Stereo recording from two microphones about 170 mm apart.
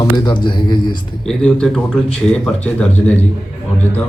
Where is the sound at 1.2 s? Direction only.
5° left (ahead or behind).